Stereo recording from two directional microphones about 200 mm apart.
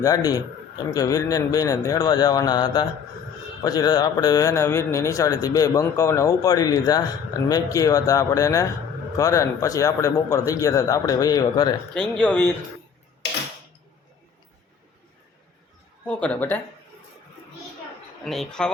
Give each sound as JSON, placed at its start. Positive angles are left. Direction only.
{"t": 0.0, "sound": "a man's voice", "side_deg": 15}
{"t": 11.9, "sound": "speech", "side_deg": 5}
{"t": 16.0, "sound": "a man's voice", "side_deg": 5}
{"t": 18.3, "sound": "speech", "side_deg": 0}